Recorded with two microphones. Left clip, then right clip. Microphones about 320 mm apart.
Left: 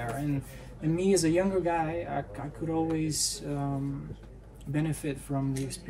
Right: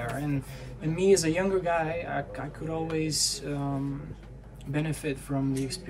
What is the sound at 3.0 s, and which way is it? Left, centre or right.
Speech, centre.